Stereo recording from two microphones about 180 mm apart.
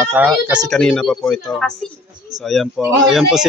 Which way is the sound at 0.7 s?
Centre (ahead or behind).